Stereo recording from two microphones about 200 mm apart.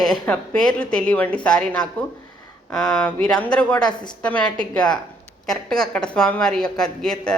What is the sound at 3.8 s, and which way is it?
Speech, 20° left (ahead or behind).